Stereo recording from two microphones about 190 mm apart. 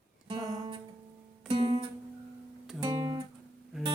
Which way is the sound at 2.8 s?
25° right (ahead or behind).